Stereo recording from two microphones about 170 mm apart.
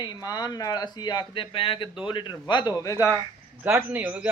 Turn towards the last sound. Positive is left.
turn(degrees=-10)  # may be behind; listen again after turning